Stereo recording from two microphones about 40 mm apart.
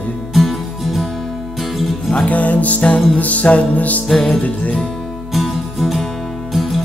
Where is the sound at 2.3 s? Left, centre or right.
Left.